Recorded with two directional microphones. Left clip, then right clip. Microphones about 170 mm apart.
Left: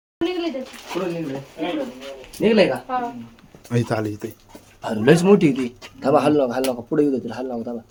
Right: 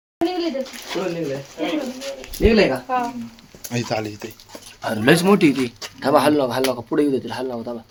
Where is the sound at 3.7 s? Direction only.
45° left (ahead or behind).